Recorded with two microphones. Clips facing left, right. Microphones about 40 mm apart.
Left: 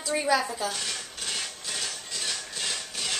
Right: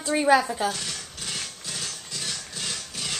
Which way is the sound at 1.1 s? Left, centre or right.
Centre.